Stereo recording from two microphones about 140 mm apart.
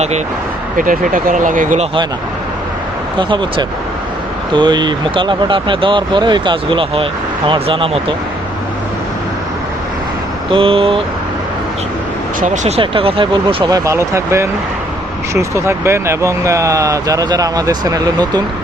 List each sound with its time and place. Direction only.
0.8 s speech: 75° right (ahead or behind)
3.2 s speech: 35° right (ahead or behind)
10.5 s speech: 40° right (ahead or behind)
12.6 s speech: 45° right (ahead or behind); by 18.4 s 30° right (ahead or behind)